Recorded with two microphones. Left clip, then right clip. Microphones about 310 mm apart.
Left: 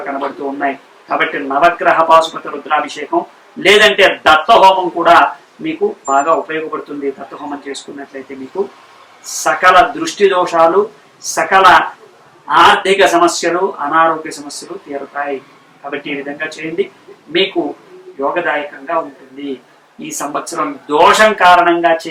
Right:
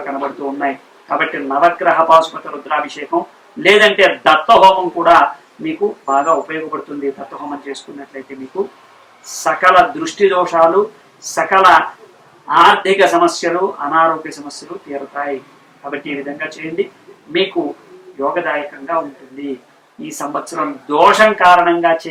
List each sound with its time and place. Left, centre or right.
0.0 s speech: centre
4.4 s speech: right
5.0 s speech: centre
9.2 s speech: centre
10.6 s speech: centre
18.2 s speech: centre